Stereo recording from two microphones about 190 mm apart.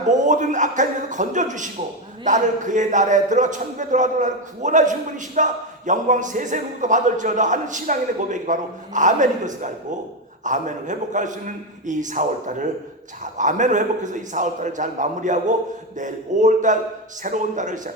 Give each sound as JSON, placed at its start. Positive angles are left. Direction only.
{"t": 0.1, "sound": "a man's voice", "side_deg": -40}